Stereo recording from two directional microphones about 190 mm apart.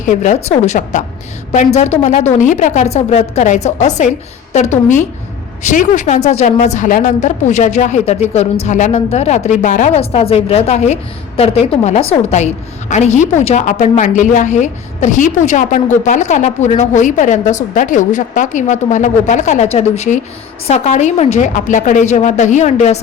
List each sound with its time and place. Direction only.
0.0 s a woman's voice: 40° left (ahead or behind)